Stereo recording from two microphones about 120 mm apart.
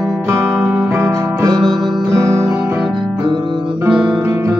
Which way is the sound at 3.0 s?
40° right (ahead or behind).